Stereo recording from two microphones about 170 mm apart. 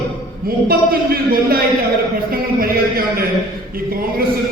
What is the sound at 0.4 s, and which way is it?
A man's voice, 60° right (ahead or behind).